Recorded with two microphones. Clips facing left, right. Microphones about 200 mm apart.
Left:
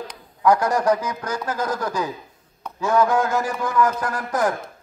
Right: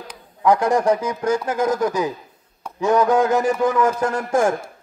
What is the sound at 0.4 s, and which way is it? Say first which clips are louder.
A man's voice: right 2 dB; 25° right (ahead or behind).